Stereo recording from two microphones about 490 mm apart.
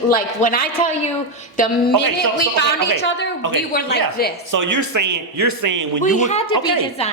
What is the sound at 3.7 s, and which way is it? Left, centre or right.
Speech, centre.